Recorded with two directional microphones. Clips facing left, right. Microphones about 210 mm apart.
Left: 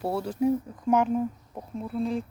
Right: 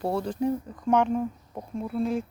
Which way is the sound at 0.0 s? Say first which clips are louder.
Left 1 dB; 5° left (ahead or behind).